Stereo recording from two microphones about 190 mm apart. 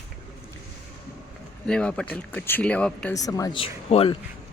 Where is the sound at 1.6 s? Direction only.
5° left (ahead or behind).